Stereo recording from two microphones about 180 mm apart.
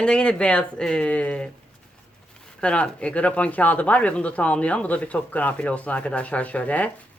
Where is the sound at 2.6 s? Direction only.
5° left (ahead or behind).